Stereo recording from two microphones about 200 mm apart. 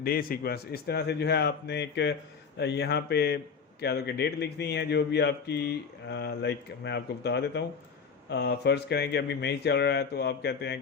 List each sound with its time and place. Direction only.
0.0 s a man's voice: 50° left (ahead or behind)